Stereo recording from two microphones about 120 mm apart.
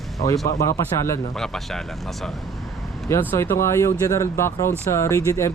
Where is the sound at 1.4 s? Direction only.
5° left (ahead or behind).